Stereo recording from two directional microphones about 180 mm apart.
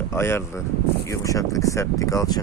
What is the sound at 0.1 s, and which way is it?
Speech, 15° left (ahead or behind).